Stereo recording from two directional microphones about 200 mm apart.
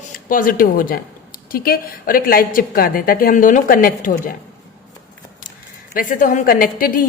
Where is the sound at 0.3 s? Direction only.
45° left (ahead or behind).